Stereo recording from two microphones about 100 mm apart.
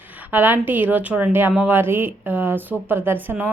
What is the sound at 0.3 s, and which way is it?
Speech, 20° right (ahead or behind).